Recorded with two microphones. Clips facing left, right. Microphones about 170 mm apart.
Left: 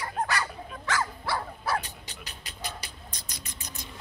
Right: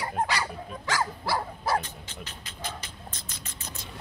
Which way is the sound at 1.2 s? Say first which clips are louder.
Right 2 dB; 35° right (ahead or behind).